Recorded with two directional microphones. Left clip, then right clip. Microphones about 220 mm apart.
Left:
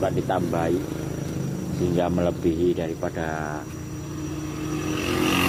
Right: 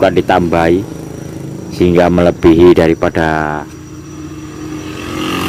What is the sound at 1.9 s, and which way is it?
Speech, 40° right (ahead or behind).